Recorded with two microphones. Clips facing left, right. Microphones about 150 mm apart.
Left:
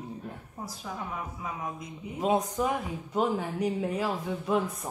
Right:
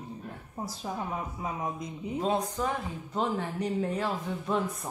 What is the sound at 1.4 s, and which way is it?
Music, 30° right (ahead or behind).